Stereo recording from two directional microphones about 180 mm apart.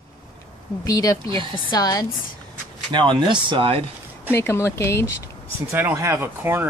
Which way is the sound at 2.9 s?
25° right (ahead or behind).